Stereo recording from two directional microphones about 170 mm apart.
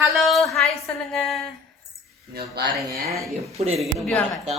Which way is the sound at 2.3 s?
65° right (ahead or behind).